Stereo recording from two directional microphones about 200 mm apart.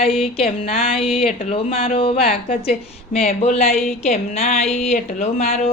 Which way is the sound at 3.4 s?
35° left (ahead or behind).